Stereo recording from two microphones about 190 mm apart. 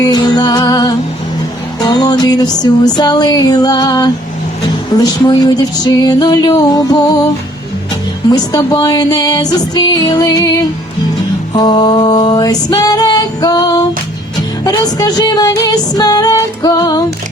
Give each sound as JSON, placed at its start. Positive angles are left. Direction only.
{"t": 0.0, "sound": "music", "side_deg": 20}
{"t": 8.3, "sound": "music", "side_deg": 20}